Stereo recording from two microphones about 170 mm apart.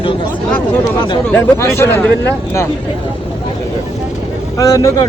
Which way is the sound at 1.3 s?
15° left (ahead or behind).